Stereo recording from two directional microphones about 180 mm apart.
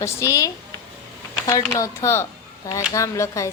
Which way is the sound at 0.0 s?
15° left (ahead or behind).